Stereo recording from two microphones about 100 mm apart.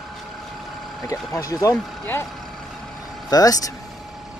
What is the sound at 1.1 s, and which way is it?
Speech, 35° left (ahead or behind).